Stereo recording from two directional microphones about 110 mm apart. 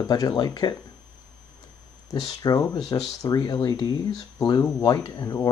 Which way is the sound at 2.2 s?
30° left (ahead or behind).